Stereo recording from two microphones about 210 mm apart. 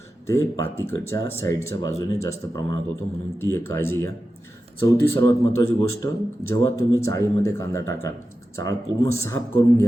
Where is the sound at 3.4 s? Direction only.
10° left (ahead or behind).